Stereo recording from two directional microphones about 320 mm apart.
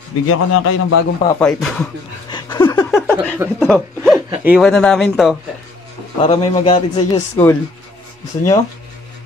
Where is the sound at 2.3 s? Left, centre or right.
Centre.